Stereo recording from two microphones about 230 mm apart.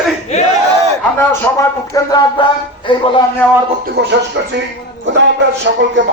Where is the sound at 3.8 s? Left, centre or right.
Right.